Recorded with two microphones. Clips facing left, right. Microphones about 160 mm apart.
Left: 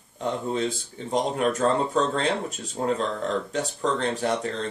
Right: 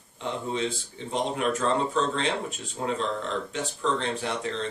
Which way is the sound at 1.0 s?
40° left (ahead or behind).